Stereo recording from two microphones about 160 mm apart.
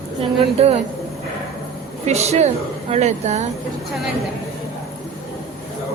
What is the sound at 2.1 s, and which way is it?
A woman's voice, 45° right (ahead or behind).